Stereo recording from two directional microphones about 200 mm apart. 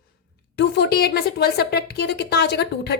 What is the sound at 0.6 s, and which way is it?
A woman's voice, 55° left (ahead or behind).